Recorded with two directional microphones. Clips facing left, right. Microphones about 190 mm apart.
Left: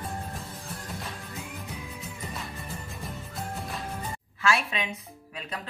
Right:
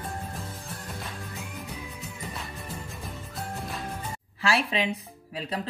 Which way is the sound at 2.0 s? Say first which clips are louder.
Even; centre (ahead or behind).